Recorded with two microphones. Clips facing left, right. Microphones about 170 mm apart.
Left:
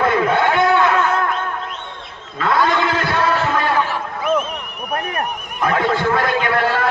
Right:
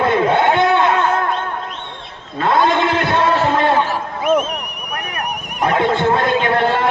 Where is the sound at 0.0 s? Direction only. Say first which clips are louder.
Right 2 dB; 25° right (ahead or behind).